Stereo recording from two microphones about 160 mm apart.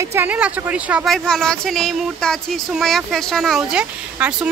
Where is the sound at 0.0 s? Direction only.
15° right (ahead or behind).